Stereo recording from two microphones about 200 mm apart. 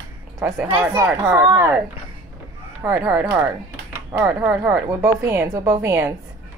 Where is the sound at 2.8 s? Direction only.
10° right (ahead or behind).